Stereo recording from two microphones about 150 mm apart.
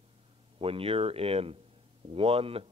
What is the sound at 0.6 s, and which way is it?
Speech, 40° right (ahead or behind).